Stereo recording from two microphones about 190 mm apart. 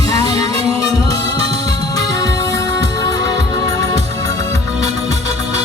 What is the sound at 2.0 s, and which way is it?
Music, 20° left (ahead or behind).